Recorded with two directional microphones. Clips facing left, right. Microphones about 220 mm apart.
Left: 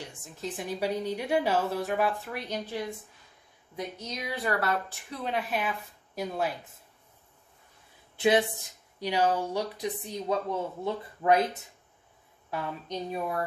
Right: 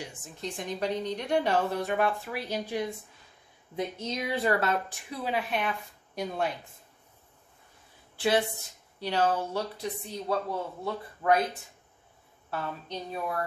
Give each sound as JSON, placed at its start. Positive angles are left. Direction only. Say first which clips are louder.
{"t": 0.0, "sound": "a woman's voice", "louder": "even", "side_deg": -5}
{"t": 3.7, "sound": "speech", "louder": "right 4 dB", "side_deg": -25}
{"t": 5.1, "sound": "a woman's voice", "louder": "right 1 dB", "side_deg": -5}
{"t": 8.2, "sound": "speech", "louder": "left 2 dB", "side_deg": 20}
{"t": 12.4, "sound": "speech", "louder": "left 1 dB", "side_deg": 15}